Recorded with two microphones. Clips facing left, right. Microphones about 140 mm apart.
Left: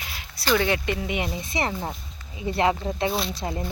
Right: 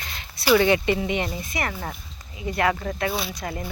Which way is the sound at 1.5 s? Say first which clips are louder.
Left 2 dB; 20° left (ahead or behind).